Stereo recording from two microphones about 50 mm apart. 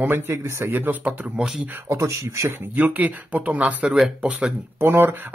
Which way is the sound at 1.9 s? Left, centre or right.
Right.